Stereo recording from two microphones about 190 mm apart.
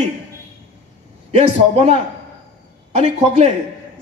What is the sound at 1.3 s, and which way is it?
Speech, 30° right (ahead or behind).